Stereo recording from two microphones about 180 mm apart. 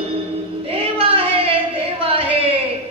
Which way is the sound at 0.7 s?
30° right (ahead or behind).